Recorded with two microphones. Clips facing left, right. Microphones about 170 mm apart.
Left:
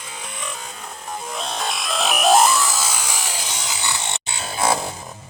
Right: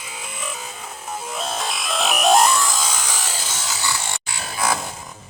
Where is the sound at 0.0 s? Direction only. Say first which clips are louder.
Even; 5° right (ahead or behind); by 4.9 s 30° left (ahead or behind).